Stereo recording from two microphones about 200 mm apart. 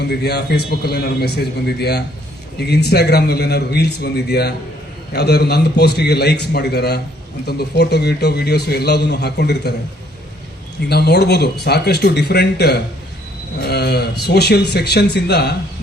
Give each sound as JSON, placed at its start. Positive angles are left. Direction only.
{"t": 0.0, "sound": "a man's voice", "side_deg": 55}
{"t": 10.8, "sound": "a man's voice", "side_deg": 55}